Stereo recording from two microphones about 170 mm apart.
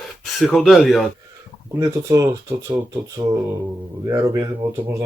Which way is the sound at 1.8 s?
20° right (ahead or behind).